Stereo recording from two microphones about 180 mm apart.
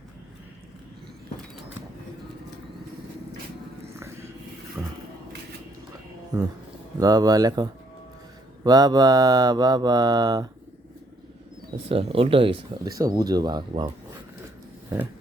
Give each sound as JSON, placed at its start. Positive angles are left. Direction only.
{"t": 3.9, "sound": "a sound", "side_deg": -15}
{"t": 4.8, "sound": "speech", "side_deg": -15}
{"t": 7.0, "sound": "mantra", "side_deg": -20}
{"t": 11.9, "sound": "speech", "side_deg": -30}
{"t": 12.9, "sound": "mantra", "side_deg": -20}